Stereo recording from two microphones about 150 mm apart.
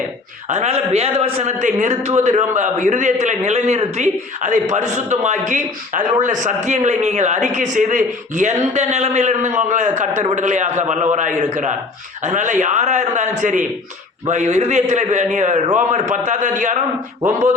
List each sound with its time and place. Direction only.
0.4 s a man's voice: 50° right (ahead or behind)